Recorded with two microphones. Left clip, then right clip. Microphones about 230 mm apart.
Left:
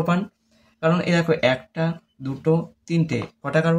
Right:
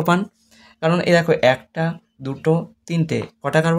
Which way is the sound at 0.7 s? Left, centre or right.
Right.